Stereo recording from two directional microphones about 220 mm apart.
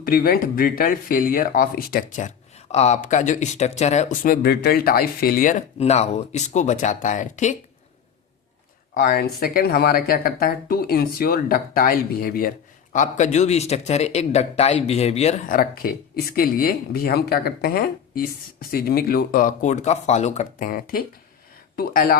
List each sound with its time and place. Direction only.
0.0 s speech: 40° left (ahead or behind)
9.0 s speech: 45° left (ahead or behind)